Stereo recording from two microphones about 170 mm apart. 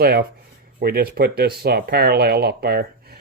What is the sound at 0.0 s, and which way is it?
Speech, 65° right (ahead or behind).